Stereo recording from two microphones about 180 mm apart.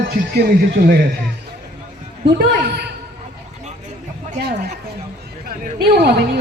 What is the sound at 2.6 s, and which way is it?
Speech, 65° right (ahead or behind).